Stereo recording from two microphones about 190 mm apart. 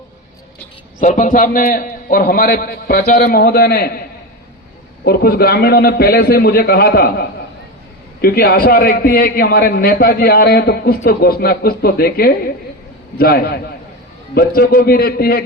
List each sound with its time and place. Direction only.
0.9 s a man's voice: 40° left (ahead or behind)
5.0 s a man's voice: 55° left (ahead or behind)